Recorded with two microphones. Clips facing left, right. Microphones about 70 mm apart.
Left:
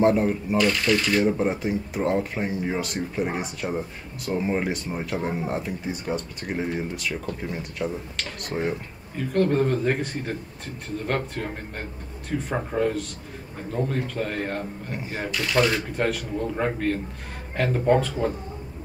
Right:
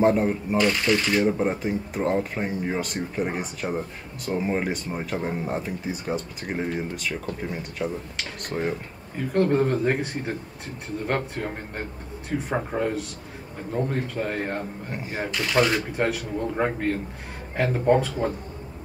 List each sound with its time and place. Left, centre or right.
0.0 s speech: centre
0.7 s speech: centre
1.2 s speech: centre
9.1 s speech: centre